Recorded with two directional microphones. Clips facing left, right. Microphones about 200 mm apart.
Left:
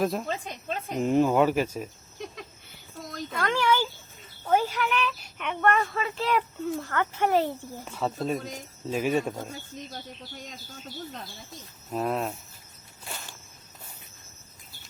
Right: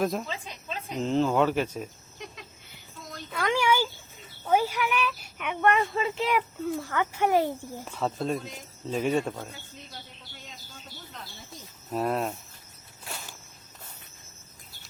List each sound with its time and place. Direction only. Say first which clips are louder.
0.0 s speech: left 1 dB; centre (ahead or behind)
0.3 s a sound: left 5 dB; 50° left (ahead or behind)
0.9 s speech: left 2 dB; 10° left (ahead or behind)
3.3 s a sound: even; 10° right (ahead or behind)
4.4 s speech: even; 10° right (ahead or behind)
7.9 s speech: even; centre (ahead or behind)
11.9 s speech: right 1 dB; centre (ahead or behind)